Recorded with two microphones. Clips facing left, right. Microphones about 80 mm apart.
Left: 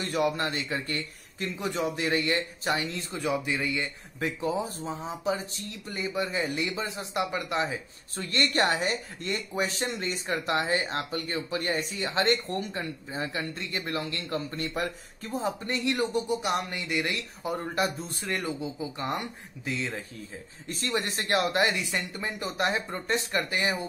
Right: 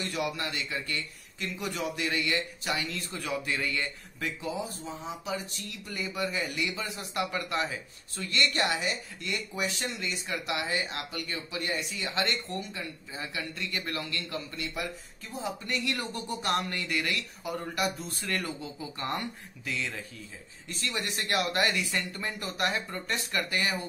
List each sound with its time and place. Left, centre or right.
0.0 s speech: left
2.9 s speech: left
4.2 s speech: left
8.2 s speech: left
20.6 s speech: left